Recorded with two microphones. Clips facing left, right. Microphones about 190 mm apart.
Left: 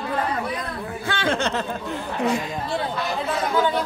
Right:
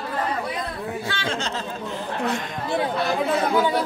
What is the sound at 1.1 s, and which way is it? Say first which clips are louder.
Speech: left 4 dB; 55° left (ahead or behind).